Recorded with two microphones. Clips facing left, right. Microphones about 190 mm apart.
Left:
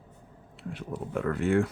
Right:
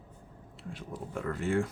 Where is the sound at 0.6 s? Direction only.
65° left (ahead or behind).